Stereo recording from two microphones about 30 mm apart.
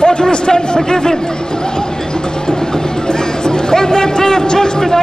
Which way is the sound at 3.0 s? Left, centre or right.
Left.